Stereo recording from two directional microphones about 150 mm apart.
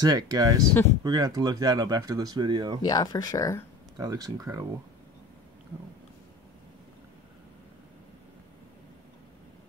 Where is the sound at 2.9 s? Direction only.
25° left (ahead or behind).